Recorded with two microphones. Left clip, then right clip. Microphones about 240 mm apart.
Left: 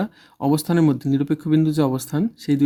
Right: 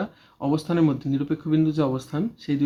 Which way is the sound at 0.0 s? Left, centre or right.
Left.